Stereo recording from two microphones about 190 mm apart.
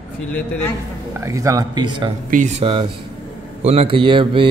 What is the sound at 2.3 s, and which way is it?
Speech, 40° right (ahead or behind).